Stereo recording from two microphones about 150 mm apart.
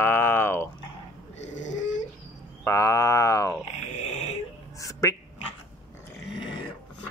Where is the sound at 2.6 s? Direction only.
20° left (ahead or behind).